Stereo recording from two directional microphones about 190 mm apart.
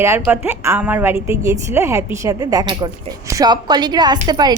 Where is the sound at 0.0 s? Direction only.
10° right (ahead or behind).